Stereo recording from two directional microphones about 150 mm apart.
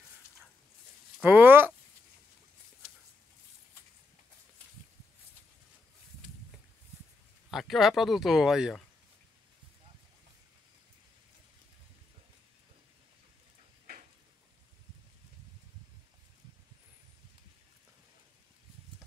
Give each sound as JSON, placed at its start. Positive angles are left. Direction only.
{"t": 1.2, "sound": "speech", "side_deg": -15}
{"t": 7.5, "sound": "speech", "side_deg": 0}